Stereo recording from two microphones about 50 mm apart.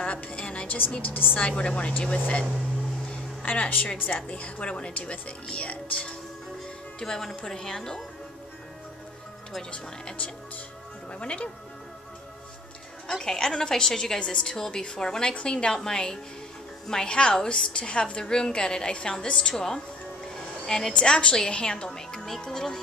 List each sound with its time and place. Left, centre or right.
0.0 s music: left
0.7 s a woman's voice: left
1.5 s speech: centre
3.4 s speech: left
7.0 s a woman's voice: centre
9.7 s speech: left
13.1 s a woman's voice: centre